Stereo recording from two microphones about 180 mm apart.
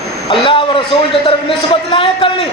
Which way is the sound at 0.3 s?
30° left (ahead or behind).